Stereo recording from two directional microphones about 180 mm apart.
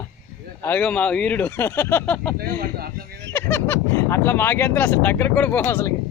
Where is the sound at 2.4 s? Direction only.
60° right (ahead or behind).